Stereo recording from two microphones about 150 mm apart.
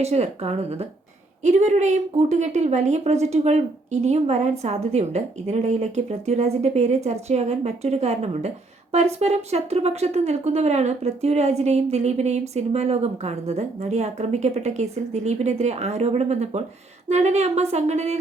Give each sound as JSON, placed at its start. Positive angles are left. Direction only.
{"t": 0.0, "sound": "a woman's voice", "side_deg": -45}